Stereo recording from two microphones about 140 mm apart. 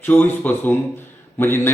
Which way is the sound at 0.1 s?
15° left (ahead or behind).